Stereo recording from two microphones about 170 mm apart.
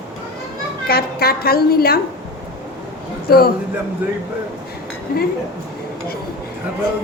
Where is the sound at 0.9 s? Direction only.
65° left (ahead or behind).